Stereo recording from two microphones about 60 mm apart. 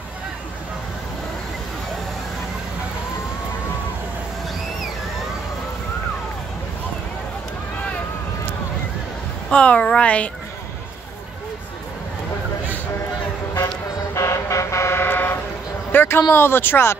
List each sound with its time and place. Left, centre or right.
9.5 s a woman's voice: centre
14.1 s vehicle: left
15.9 s a sound: left
16.3 s speech: left